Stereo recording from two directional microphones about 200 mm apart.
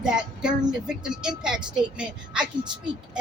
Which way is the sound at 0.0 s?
5° right (ahead or behind).